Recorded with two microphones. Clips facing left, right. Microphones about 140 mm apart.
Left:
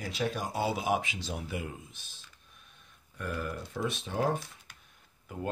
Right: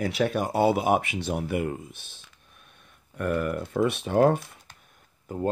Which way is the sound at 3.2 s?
60° right (ahead or behind).